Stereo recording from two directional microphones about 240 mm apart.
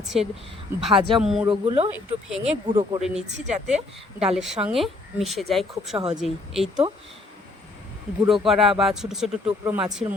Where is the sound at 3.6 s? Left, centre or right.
Centre.